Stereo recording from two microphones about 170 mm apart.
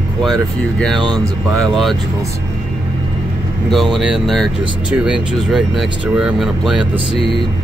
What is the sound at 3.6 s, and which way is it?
Speech, centre (ahead or behind).